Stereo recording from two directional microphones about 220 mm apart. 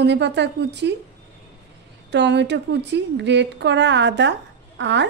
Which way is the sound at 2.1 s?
50° right (ahead or behind).